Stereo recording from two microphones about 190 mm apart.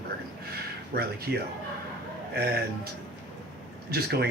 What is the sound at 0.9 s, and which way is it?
Speech, 55° right (ahead or behind).